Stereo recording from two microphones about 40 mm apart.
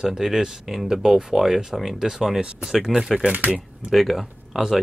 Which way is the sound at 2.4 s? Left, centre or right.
Right.